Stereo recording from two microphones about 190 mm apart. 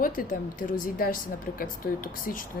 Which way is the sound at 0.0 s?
45° left (ahead or behind).